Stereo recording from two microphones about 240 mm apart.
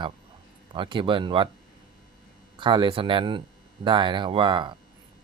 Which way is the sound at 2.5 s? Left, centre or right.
Centre.